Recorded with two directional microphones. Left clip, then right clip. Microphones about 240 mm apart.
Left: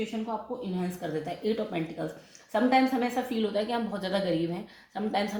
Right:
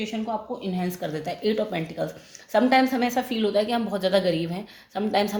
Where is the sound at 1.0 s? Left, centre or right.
Right.